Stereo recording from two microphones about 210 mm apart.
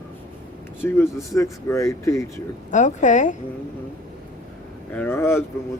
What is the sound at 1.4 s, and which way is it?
Speech, 15° left (ahead or behind).